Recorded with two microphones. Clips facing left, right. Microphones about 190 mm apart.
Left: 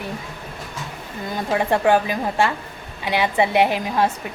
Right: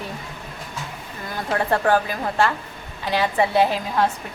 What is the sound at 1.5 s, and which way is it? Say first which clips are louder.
A woman's voice: left 2 dB; 15° left (ahead or behind).